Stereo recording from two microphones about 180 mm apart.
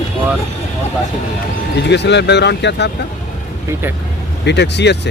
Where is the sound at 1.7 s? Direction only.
70° left (ahead or behind).